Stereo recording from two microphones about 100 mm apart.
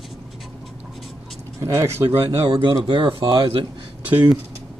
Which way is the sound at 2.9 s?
60° right (ahead or behind).